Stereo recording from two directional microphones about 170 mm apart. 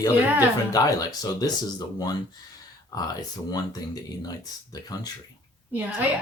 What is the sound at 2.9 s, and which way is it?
Speech, 20° left (ahead or behind).